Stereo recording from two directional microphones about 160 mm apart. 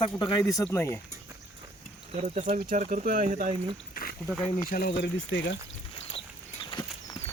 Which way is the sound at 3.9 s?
65° left (ahead or behind).